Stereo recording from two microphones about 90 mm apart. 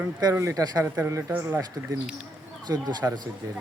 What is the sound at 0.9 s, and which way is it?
Speech, 25° right (ahead or behind).